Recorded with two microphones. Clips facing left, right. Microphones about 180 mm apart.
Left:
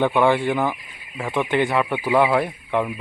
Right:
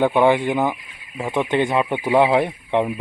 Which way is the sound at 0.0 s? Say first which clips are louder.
Right 2 dB; 15° right (ahead or behind).